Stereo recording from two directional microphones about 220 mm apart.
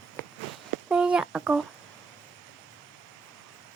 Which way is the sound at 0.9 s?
5° right (ahead or behind).